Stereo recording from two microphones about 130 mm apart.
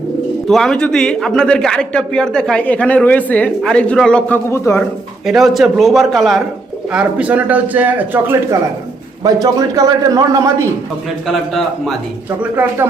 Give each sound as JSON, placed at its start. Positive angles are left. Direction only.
{"t": 0.4, "sound": "a man's voice", "side_deg": 5}
{"t": 4.4, "sound": "a man's voice", "side_deg": 20}
{"t": 5.2, "sound": "a man's voice", "side_deg": 0}
{"t": 6.9, "sound": "a man's voice", "side_deg": -10}
{"t": 9.2, "sound": "a man's voice", "side_deg": -25}
{"t": 11.3, "sound": "a man's voice", "side_deg": 0}
{"t": 12.4, "sound": "a man's voice", "side_deg": -15}